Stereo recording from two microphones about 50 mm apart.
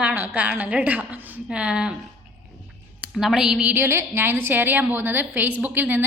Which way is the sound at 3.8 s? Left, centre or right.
Right.